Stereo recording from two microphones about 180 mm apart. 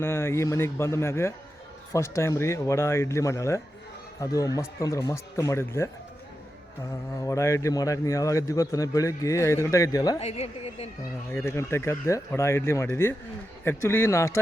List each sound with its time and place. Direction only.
0.0 s speech: 15° left (ahead or behind)
7.2 s speech: 15° left (ahead or behind)
10.2 s speech: 35° left (ahead or behind)
11.3 s speech: 15° left (ahead or behind)